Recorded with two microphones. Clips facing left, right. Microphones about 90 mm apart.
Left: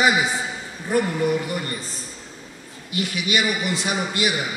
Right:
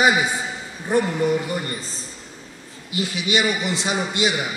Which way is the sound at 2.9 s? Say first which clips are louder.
Right 1 dB; 20° right (ahead or behind).